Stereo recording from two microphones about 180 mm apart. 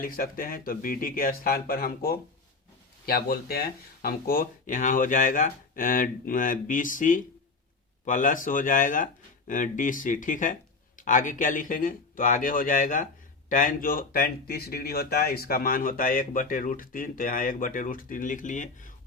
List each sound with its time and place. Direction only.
0.0 s speech: 55° left (ahead or behind)